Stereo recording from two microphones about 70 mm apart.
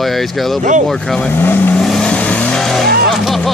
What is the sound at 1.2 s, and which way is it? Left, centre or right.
Speech, left.